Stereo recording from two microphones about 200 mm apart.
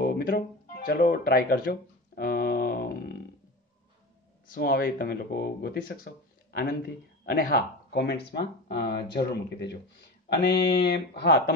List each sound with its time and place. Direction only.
0.0 s music: 50° left (ahead or behind)
4.6 s speech: 50° left (ahead or behind)